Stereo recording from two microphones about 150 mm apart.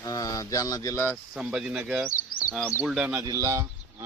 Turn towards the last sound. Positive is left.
turn(degrees=-20)  # may be behind; listen again after turning